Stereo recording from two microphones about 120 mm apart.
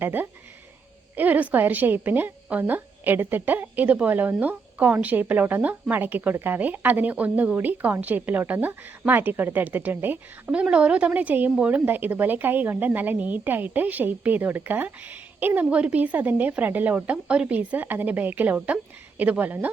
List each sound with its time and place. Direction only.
0.0 s a woman's voice: 15° right (ahead or behind)